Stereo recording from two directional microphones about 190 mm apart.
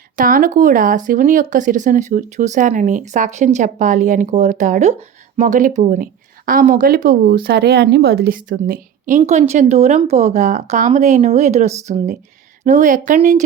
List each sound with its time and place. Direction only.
0.2 s speech: 45° right (ahead or behind)